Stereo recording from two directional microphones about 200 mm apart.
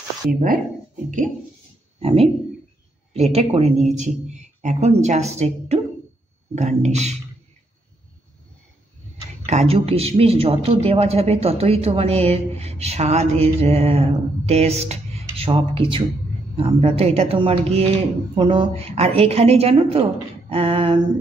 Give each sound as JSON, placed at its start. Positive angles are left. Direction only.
{"t": 0.3, "sound": "speech", "side_deg": -45}
{"t": 2.0, "sound": "speech", "side_deg": -30}
{"t": 9.5, "sound": "a woman's voice", "side_deg": -30}